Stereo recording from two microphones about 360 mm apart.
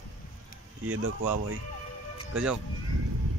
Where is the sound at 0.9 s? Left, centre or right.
Right.